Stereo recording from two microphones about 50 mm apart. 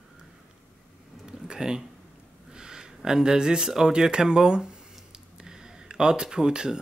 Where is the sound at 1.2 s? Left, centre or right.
Centre.